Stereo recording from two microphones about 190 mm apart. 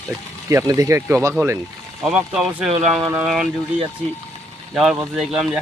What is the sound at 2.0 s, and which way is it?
Speech, 5° right (ahead or behind).